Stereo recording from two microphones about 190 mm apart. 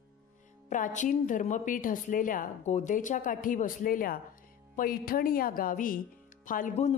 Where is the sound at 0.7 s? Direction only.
40° left (ahead or behind).